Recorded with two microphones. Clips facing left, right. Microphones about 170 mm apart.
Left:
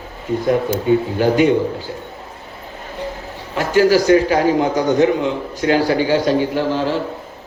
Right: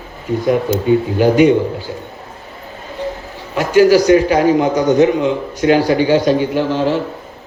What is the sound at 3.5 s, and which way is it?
A man's voice, 15° right (ahead or behind).